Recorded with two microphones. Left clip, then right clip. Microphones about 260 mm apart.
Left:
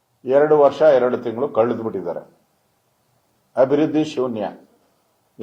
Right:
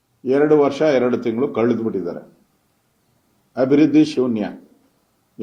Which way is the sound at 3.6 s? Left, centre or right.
Centre.